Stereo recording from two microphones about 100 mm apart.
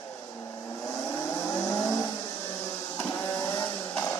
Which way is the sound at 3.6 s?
25° left (ahead or behind).